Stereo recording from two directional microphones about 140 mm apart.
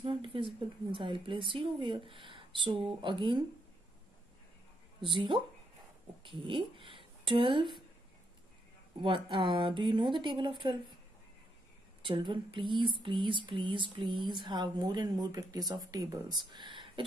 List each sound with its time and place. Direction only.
0.0 s a sound: 40° right (ahead or behind)
0.9 s speech: 35° right (ahead or behind)
5.1 s speech: 35° right (ahead or behind)
9.0 s speech: 35° right (ahead or behind)
12.0 s speech: 35° right (ahead or behind)